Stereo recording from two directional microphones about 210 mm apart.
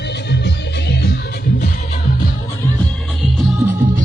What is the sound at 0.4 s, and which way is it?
Music, 55° left (ahead or behind).